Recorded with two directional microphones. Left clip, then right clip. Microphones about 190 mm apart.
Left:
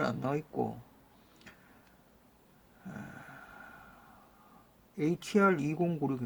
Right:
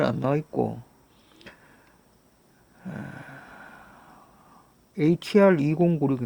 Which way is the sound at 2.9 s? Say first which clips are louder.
Right 7 dB; 50° right (ahead or behind).